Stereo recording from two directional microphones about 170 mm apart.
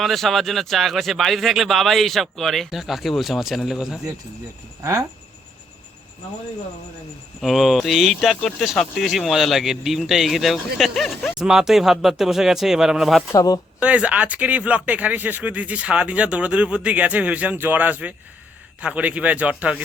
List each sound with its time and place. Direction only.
0.0 s speech: centre (ahead or behind)
4.8 s speech: 20° right (ahead or behind)
7.4 s speech: centre (ahead or behind)
13.3 s speech: 20° left (ahead or behind)
13.7 s speech: 5° right (ahead or behind)